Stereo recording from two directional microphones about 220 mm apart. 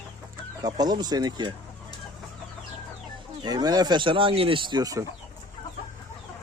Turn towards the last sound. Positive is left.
turn(degrees=-15)  # may be behind; listen again after turning